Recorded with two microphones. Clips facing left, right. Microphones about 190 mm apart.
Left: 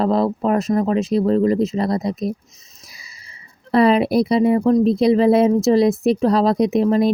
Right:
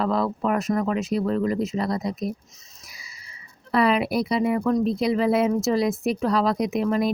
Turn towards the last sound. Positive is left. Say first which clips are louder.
# left 7 dB
turn(degrees=30)  # may be behind; listen again after turning